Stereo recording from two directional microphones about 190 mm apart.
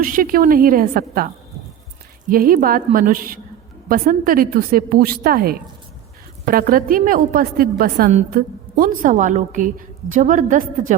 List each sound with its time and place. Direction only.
0.0 s a woman's voice: 45° right (ahead or behind)
2.3 s a woman's voice: 50° right (ahead or behind)